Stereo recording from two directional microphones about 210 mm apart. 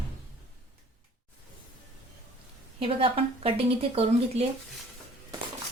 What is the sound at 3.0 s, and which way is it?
Speech, 25° right (ahead or behind).